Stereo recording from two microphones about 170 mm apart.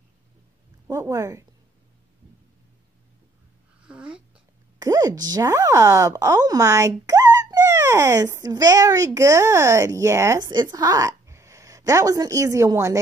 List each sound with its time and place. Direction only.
0.8 s speech: 20° right (ahead or behind)
3.8 s a sound: 5° right (ahead or behind)
4.7 s speech: 20° right (ahead or behind)